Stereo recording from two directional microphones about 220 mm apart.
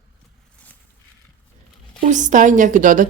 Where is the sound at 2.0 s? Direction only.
35° right (ahead or behind).